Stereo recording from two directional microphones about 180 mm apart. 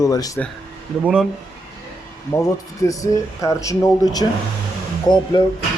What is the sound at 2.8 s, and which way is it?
Speech, 15° left (ahead or behind).